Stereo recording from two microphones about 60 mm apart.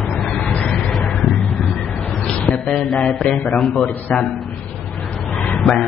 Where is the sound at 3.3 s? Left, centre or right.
Centre.